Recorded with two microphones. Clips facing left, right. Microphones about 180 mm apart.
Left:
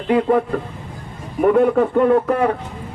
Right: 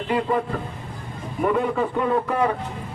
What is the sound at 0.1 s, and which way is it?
Speech, 55° left (ahead or behind).